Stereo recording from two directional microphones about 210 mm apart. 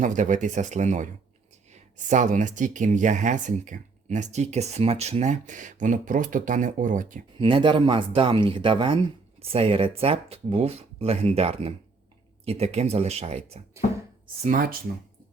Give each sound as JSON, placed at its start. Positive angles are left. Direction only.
{"t": 0.0, "sound": "speech", "side_deg": -35}
{"t": 7.3, "sound": "speech", "side_deg": -25}
{"t": 14.4, "sound": "speech", "side_deg": -40}